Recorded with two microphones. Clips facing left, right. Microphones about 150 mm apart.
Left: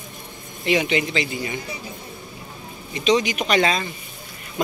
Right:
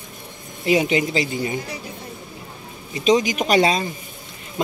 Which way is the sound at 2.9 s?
40° right (ahead or behind).